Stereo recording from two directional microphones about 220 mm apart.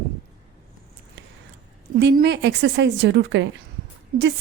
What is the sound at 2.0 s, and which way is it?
A woman's voice, 50° right (ahead or behind).